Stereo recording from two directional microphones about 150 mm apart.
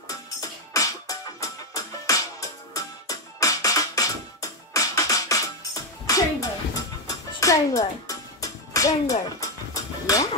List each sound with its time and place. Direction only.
0.1 s music: 25° left (ahead or behind)